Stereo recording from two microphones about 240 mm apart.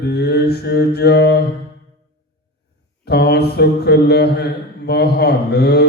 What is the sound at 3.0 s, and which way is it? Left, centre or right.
Mantra, left.